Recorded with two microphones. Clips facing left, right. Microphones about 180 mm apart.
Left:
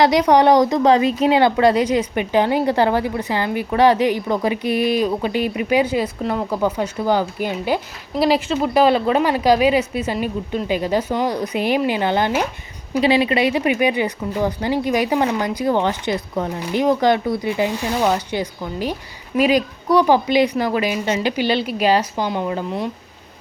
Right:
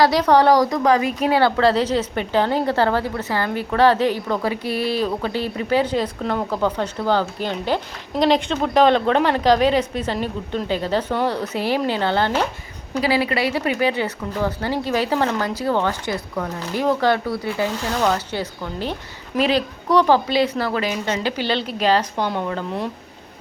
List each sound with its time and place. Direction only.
0.0 s a woman's voice: 15° left (ahead or behind)